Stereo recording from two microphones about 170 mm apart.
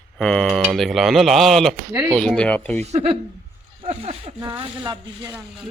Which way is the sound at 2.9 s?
40° right (ahead or behind).